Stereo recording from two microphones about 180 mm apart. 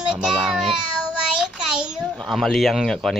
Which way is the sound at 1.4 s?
5° right (ahead or behind).